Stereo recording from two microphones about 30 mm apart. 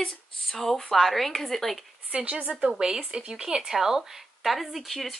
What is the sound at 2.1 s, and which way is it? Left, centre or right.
Speech, right.